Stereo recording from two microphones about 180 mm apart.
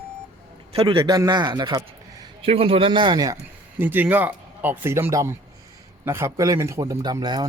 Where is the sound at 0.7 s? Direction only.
30° right (ahead or behind).